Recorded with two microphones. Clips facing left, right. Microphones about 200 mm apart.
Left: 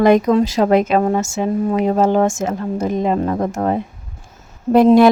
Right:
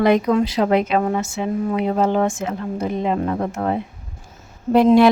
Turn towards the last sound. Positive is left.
turn(degrees=45)  # may be behind; listen again after turning